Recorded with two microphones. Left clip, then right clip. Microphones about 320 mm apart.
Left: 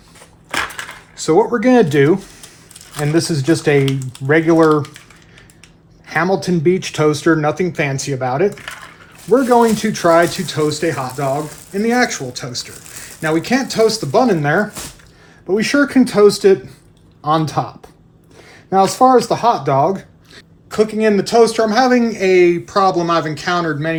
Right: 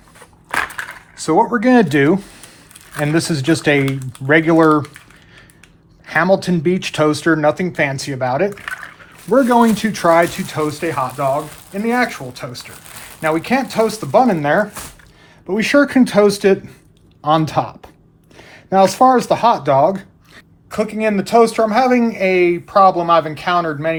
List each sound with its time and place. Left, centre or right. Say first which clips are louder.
1.1 s speech: left 1 dB; right
6.1 s speech: right 2 dB; right
18.9 s speech: left 1 dB; right